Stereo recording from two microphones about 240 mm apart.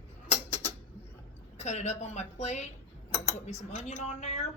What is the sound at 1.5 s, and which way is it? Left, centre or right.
A woman's voice, left.